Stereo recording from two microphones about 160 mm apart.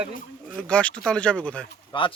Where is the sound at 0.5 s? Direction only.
5° left (ahead or behind).